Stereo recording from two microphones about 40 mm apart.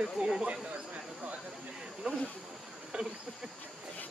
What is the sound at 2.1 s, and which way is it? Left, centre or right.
Speech, right.